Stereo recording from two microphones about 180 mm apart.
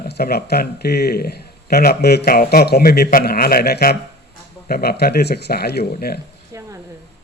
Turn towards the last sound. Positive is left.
turn(degrees=-20)  # may be behind; listen again after turning